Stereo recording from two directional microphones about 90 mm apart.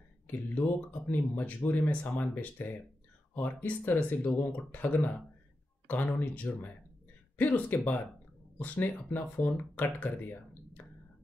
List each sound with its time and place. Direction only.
0.3 s speech: 20° left (ahead or behind)